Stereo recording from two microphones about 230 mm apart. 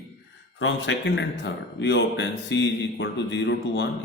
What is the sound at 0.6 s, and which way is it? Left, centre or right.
Speech, left.